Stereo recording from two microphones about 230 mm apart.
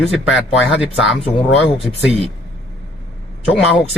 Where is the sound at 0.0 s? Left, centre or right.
Centre.